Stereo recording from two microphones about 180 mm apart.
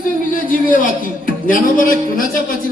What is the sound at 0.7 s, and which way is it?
A man's voice, 50° left (ahead or behind).